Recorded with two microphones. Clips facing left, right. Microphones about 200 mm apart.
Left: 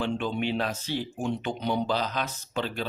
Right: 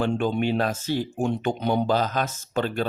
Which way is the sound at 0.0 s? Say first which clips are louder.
Right 5 dB; 45° right (ahead or behind).